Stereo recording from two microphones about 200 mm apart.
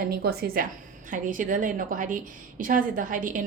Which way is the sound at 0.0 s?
50° right (ahead or behind).